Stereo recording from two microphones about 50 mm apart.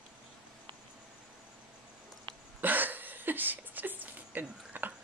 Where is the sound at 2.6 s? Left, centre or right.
Right.